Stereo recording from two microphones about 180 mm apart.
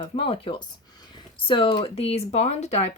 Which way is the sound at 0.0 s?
30° left (ahead or behind).